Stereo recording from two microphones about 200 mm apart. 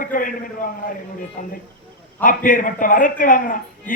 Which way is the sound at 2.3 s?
45° left (ahead or behind).